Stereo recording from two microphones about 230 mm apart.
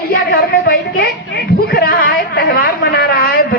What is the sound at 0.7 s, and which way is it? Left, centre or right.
A woman's voice, left.